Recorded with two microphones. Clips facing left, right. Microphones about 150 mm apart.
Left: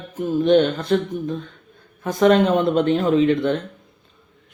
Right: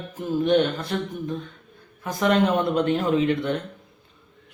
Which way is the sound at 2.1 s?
25° left (ahead or behind).